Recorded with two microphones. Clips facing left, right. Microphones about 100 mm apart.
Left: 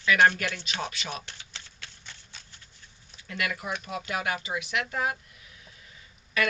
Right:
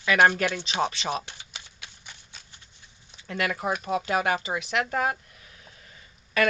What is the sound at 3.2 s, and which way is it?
Speech, 35° right (ahead or behind).